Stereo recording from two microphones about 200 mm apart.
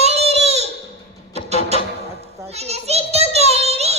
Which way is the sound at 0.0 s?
30° right (ahead or behind).